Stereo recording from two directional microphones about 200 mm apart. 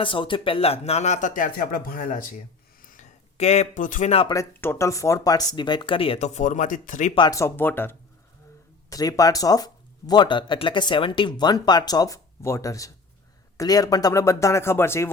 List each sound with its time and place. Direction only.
0.0 s speech: 25° left (ahead or behind)
4.3 s speech: 15° left (ahead or behind); by 7.1 s 40° left (ahead or behind)
7.2 s speech: 15° left (ahead or behind)